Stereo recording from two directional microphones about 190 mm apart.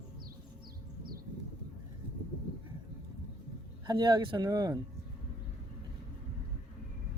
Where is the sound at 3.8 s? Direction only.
20° right (ahead or behind).